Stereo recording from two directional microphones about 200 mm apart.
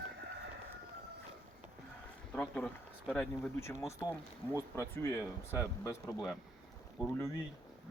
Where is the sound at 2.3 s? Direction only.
5° left (ahead or behind).